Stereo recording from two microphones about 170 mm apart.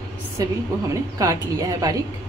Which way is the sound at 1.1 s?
20° right (ahead or behind).